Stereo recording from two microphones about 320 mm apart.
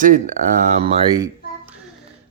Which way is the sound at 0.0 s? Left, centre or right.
Right.